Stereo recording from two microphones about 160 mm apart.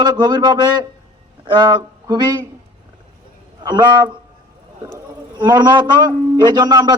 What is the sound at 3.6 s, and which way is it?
A man's voice, 30° right (ahead or behind).